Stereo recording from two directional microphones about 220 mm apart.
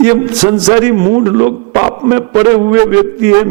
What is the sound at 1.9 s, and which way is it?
A man's voice, 15° right (ahead or behind).